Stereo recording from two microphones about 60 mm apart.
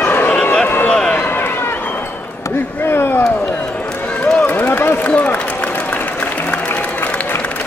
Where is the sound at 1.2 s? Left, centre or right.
Left.